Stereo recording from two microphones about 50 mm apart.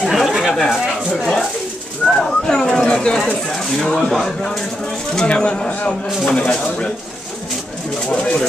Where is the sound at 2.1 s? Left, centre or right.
Centre.